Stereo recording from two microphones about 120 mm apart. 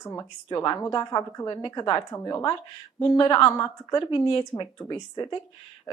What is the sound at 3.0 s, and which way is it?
A woman's voice, 35° left (ahead or behind).